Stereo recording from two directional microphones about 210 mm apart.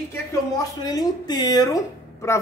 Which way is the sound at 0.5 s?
20° left (ahead or behind).